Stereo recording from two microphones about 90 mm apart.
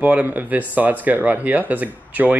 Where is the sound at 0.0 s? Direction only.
15° right (ahead or behind).